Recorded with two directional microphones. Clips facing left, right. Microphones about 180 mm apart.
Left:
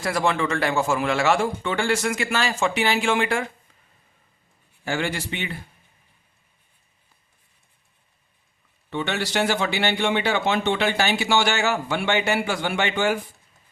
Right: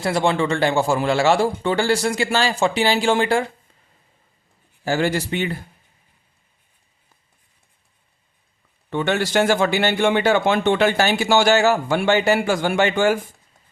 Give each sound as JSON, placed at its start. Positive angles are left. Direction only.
{"t": 0.0, "sound": "a man's voice", "side_deg": -25}
{"t": 4.8, "sound": "a man's voice", "side_deg": -40}
{"t": 8.9, "sound": "a man's voice", "side_deg": -50}